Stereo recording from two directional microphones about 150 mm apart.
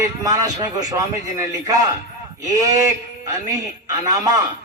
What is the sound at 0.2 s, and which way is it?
A man's voice, 20° right (ahead or behind).